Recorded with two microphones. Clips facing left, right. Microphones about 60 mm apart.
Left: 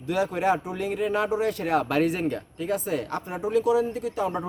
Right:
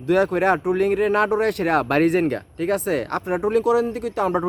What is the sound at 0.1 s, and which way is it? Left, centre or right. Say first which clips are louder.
Speech: right 6 dB; right.